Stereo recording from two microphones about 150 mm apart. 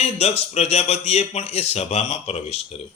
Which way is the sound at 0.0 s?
45° left (ahead or behind).